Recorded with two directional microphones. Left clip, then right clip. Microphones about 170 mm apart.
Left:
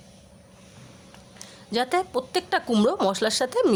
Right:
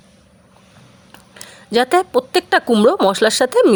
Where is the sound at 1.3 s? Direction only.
35° right (ahead or behind).